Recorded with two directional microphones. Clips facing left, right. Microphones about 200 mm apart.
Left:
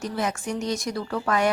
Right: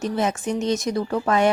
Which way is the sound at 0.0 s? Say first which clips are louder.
Right 4 dB; 25° right (ahead or behind).